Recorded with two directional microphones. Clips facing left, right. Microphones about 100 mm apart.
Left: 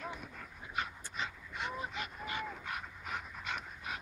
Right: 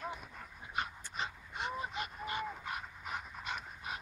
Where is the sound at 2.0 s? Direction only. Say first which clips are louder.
Right 1 dB; 30° right (ahead or behind).